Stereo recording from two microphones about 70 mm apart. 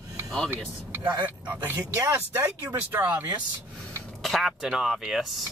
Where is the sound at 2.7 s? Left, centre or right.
Right.